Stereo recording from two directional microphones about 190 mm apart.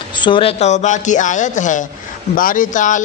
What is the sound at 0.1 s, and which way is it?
Speech, 25° left (ahead or behind).